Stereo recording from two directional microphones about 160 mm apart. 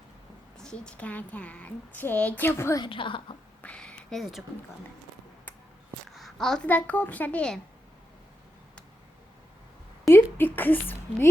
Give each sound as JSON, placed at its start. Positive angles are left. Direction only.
{"t": 0.6, "sound": "speech", "side_deg": 5}
{"t": 2.8, "sound": "a woman's voice", "side_deg": 30}
{"t": 3.6, "sound": "a sound", "side_deg": 5}
{"t": 6.1, "sound": "a woman's voice", "side_deg": 0}
{"t": 10.3, "sound": "speech", "side_deg": 10}